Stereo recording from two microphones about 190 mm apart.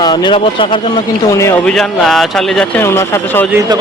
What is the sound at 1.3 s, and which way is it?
Speech, 15° left (ahead or behind).